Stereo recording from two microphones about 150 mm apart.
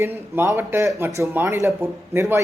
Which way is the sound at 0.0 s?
15° right (ahead or behind).